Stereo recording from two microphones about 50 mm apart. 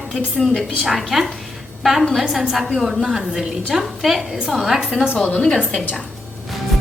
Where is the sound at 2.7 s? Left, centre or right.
Centre.